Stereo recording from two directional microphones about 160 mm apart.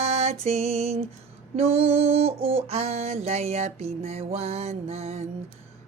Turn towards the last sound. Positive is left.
turn(degrees=-40)  # may be behind; listen again after turning